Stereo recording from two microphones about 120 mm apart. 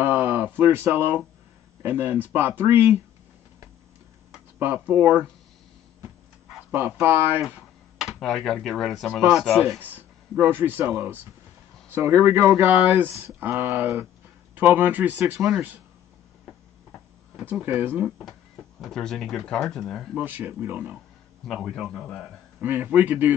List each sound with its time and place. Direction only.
0.0 s a sound: 15° right (ahead or behind)
1.8 s speech: 15° right (ahead or behind)
4.6 s speech: 15° right (ahead or behind)
6.7 s speech: 15° right (ahead or behind)
7.4 s speech: 5° right (ahead or behind)
9.8 s speech: 15° right (ahead or behind)
17.4 s speech: 10° right (ahead or behind)
18.8 s speech: 5° left (ahead or behind)
20.2 s speech: 15° right (ahead or behind)
21.5 s speech: centre (ahead or behind)
22.6 s speech: 15° right (ahead or behind)